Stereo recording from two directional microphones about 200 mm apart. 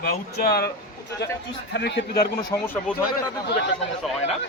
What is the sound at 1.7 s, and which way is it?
Speech, 55° left (ahead or behind).